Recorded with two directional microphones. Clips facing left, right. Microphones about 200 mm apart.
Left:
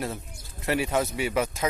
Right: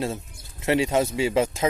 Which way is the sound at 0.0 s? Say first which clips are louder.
Right 4 dB; 20° right (ahead or behind).